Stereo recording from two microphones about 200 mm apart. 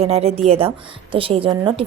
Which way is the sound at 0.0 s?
30° right (ahead or behind).